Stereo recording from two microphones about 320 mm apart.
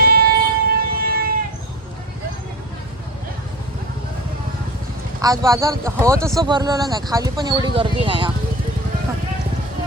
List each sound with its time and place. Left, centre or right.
0.0 s music: right
5.2 s speech: centre